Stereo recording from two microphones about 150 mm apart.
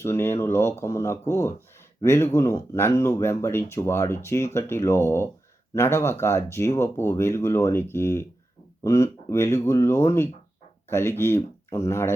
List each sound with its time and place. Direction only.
0.0 s speech: 15° left (ahead or behind)